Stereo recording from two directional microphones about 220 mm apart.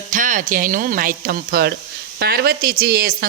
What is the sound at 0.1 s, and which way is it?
Speech, 35° right (ahead or behind).